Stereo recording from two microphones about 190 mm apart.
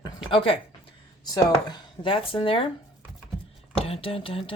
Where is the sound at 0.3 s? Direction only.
30° left (ahead or behind).